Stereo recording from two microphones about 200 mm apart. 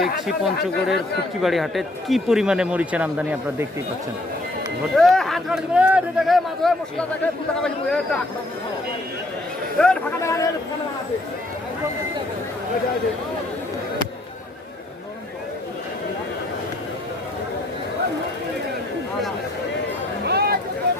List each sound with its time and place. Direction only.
0.6 s speech: centre (ahead or behind)
4.9 s speech: centre (ahead or behind)
9.7 s a man's voice: 5° left (ahead or behind)
20.2 s a sound: 55° right (ahead or behind)